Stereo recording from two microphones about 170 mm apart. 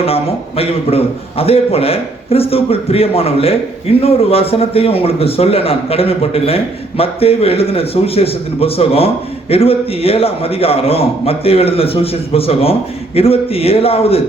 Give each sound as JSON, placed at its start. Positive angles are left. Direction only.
{"t": 0.0, "sound": "speech", "side_deg": 35}